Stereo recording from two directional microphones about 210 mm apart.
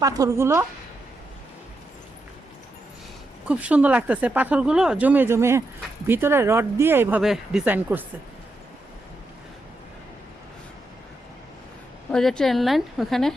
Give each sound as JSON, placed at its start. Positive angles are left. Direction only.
{"t": 0.0, "sound": "speech", "side_deg": -15}
{"t": 3.4, "sound": "speech", "side_deg": -5}
{"t": 12.1, "sound": "a woman's voice", "side_deg": 0}